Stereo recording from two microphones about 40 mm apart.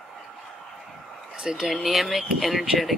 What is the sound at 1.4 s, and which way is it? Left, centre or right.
Speech, centre.